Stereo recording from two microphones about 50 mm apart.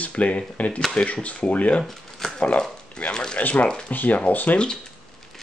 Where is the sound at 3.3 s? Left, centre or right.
Left.